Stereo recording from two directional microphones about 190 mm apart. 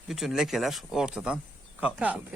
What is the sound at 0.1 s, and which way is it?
Speech, centre (ahead or behind).